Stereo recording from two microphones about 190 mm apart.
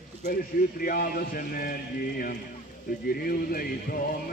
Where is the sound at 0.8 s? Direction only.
50° left (ahead or behind).